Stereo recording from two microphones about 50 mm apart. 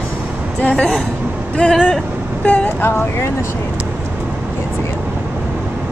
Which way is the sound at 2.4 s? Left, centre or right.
Left.